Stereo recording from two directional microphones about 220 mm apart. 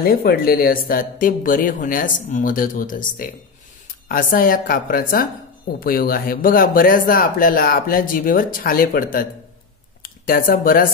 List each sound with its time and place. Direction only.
0.0 s speech: 45° left (ahead or behind)